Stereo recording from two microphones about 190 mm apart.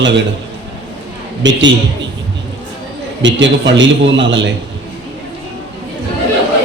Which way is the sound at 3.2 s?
70° right (ahead or behind).